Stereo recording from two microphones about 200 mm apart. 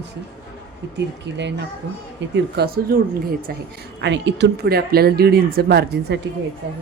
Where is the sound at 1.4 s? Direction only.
60° right (ahead or behind).